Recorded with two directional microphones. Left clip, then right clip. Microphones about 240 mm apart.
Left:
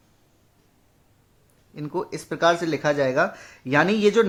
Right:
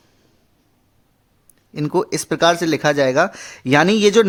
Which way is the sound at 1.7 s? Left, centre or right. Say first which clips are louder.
Right 9 dB; right.